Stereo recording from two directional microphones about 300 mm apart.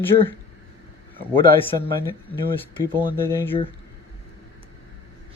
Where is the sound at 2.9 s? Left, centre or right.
Centre.